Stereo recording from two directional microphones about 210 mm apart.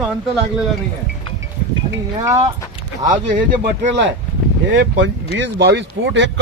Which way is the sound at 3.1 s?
35° right (ahead or behind).